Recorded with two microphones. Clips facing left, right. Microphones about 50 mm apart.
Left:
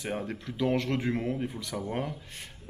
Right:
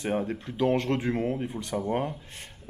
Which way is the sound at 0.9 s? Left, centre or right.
Right.